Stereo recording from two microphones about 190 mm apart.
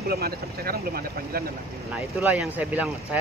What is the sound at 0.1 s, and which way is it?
Speech, 55° right (ahead or behind).